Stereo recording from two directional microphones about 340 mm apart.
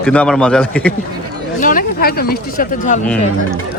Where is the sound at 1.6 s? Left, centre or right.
Left.